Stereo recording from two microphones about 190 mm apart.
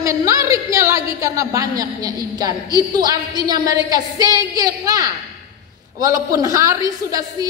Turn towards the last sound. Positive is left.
turn(degrees=-20)  # may be behind; listen again after turning